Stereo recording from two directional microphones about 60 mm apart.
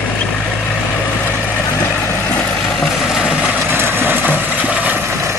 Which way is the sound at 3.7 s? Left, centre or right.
Right.